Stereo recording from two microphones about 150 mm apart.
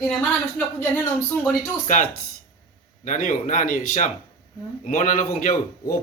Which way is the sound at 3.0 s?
60° left (ahead or behind).